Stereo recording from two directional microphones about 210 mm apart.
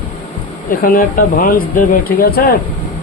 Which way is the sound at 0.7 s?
45° left (ahead or behind).